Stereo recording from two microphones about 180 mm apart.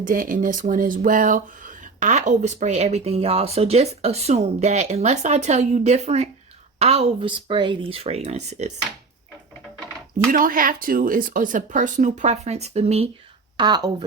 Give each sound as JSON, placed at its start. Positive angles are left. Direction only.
{"t": 0.1, "sound": "speech", "side_deg": -50}
{"t": 10.3, "sound": "speech", "side_deg": -50}
{"t": 13.6, "sound": "a woman's voice", "side_deg": -25}